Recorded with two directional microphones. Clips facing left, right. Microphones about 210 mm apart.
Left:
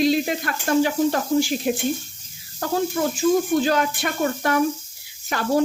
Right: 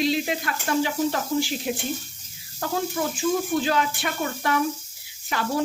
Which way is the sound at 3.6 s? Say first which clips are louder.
Left 3 dB; 45° left (ahead or behind).